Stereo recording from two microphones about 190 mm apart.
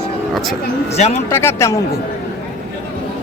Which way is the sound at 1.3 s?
15° left (ahead or behind).